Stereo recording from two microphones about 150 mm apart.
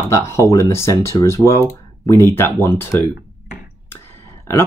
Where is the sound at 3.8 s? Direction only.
15° left (ahead or behind).